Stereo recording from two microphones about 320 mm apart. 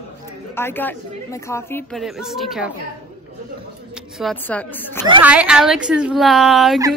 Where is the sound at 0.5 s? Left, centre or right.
Centre.